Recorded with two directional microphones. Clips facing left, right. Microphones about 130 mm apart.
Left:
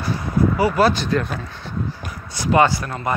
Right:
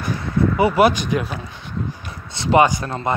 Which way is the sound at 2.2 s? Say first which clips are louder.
Right 1 dB; 25° right (ahead or behind).